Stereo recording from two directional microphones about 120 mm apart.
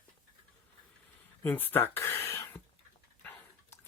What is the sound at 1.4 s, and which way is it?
Speech, 15° left (ahead or behind).